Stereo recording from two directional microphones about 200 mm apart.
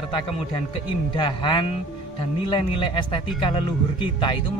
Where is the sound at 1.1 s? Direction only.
25° left (ahead or behind).